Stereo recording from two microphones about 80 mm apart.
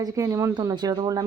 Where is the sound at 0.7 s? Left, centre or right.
Right.